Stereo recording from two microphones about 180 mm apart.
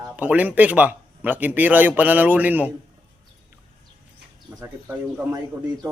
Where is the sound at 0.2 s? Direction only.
10° right (ahead or behind).